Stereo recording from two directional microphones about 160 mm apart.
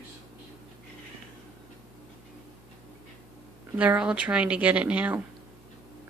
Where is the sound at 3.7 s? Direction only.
10° right (ahead or behind).